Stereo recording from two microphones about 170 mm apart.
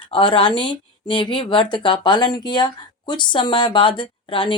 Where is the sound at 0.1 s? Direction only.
30° left (ahead or behind).